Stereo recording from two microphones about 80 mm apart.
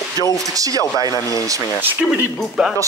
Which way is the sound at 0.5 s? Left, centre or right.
Right.